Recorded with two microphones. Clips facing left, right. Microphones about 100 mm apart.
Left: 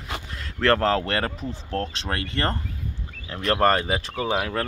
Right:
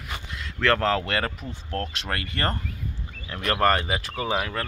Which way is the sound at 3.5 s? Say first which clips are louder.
Left 2 dB; 35° left (ahead or behind).